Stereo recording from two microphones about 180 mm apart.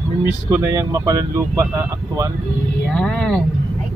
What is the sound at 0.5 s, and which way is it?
Speech, 15° right (ahead or behind).